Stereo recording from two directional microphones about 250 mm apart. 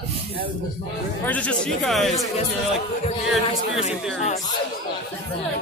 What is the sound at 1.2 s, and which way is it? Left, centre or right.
Speech, centre.